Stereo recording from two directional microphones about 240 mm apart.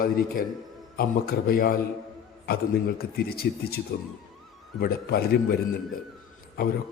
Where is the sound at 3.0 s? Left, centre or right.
Left.